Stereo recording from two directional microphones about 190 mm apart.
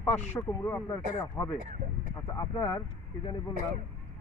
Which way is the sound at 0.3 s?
10° left (ahead or behind).